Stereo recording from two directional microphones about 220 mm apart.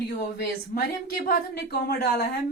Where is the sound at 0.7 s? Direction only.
40° left (ahead or behind).